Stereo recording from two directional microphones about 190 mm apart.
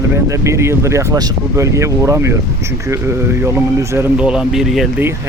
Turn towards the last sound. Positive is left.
turn(degrees=0)  # may be behind; listen again after turning